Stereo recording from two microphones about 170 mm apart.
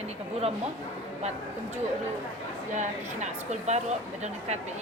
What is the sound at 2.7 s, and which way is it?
Speech, 45° right (ahead or behind).